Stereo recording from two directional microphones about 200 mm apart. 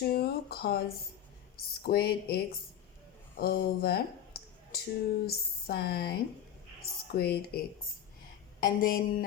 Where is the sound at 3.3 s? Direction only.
50° left (ahead or behind).